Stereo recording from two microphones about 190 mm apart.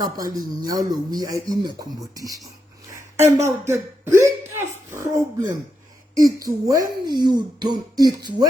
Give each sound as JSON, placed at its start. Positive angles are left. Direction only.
{"t": 0.0, "sound": "speech", "side_deg": -20}
{"t": 3.2, "sound": "a sound", "side_deg": -15}
{"t": 6.1, "sound": "speech", "side_deg": -20}